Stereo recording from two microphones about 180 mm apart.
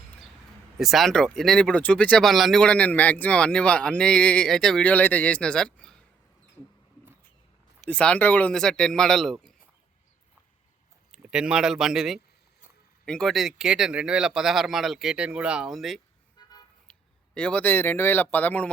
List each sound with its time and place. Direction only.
0.8 s speech: centre (ahead or behind)
7.9 s speech: 5° left (ahead or behind)
11.1 s speech: 5° right (ahead or behind)
16.4 s vehicle: 25° left (ahead or behind)
16.9 s speech: 5° left (ahead or behind)